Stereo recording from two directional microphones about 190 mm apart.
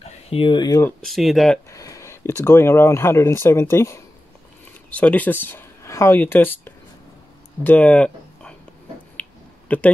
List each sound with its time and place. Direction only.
0.3 s speech: 25° left (ahead or behind)
1.0 s speech: centre (ahead or behind)
1.7 s speech: 15° left (ahead or behind)
7.6 s a sound: 5° left (ahead or behind)
9.7 s speech: 10° left (ahead or behind)